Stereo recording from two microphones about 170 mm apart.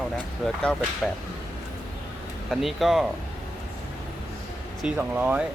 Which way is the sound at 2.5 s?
Centre (ahead or behind).